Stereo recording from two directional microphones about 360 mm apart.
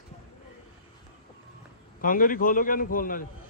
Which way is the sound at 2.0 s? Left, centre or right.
Left.